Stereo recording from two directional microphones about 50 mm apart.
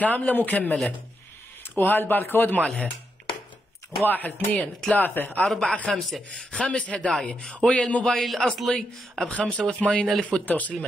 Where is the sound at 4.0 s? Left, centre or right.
Left.